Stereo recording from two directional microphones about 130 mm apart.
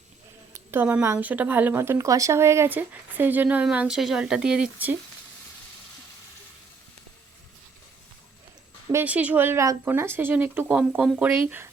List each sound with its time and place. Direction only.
0.7 s a woman's voice: 15° right (ahead or behind)
8.9 s a woman's voice: 15° right (ahead or behind)